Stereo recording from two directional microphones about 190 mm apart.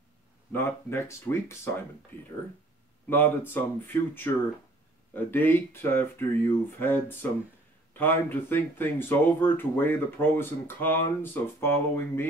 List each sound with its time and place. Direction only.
0.5 s speech: 10° left (ahead or behind)
3.1 s speech: 10° left (ahead or behind)